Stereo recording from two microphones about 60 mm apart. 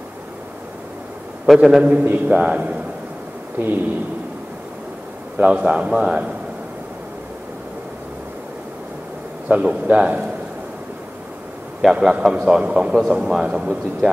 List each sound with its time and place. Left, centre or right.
1.4 s a man's voice: centre
1.8 s a man's voice: right
3.6 s speech: right
5.4 s a man's voice: centre
9.5 s a man's voice: right
11.9 s speech: centre